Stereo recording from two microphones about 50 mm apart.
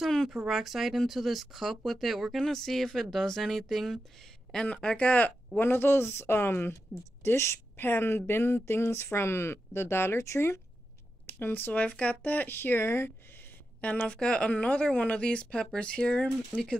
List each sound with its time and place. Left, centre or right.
0.0 s a sound: centre
0.5 s speech: centre
4.7 s a woman's voice: left
5.6 s a woman's voice: left
7.2 s a woman's voice: left
10.2 s speech: left
11.3 s speech: left
13.7 s a woman's voice: left
14.2 s a woman's voice: centre